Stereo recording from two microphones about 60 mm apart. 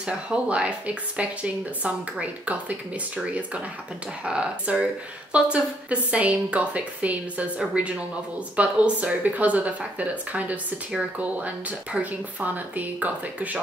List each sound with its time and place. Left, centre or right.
0.5 s a woman's voice: right